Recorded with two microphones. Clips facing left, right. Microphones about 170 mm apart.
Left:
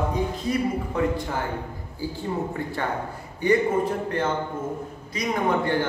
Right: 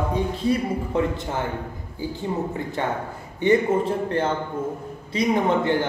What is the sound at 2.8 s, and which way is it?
A man's voice, 20° right (ahead or behind).